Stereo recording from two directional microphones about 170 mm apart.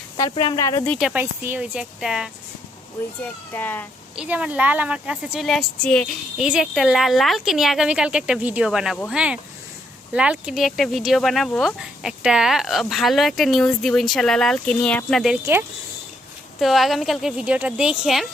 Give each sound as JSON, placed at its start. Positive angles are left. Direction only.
{"t": 0.2, "sound": "speech", "side_deg": 30}
{"t": 0.9, "sound": "speech", "side_deg": -5}
{"t": 3.2, "sound": "speech", "side_deg": 10}
{"t": 4.1, "sound": "speech", "side_deg": -5}
{"t": 16.6, "sound": "speech", "side_deg": 0}